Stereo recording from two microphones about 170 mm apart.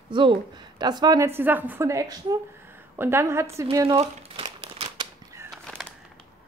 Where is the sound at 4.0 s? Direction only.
35° right (ahead or behind).